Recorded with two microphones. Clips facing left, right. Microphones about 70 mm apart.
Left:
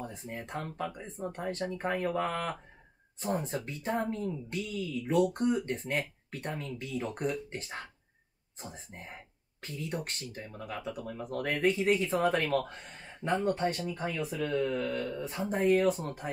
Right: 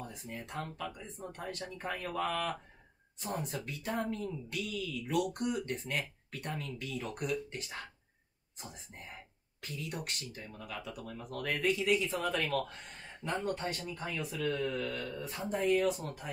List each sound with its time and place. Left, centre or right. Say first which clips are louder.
0.0 s speech: left 4 dB; left
13.7 s speech: left 5 dB; left